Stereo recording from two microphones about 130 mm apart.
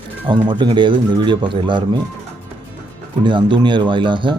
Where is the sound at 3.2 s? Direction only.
35° right (ahead or behind).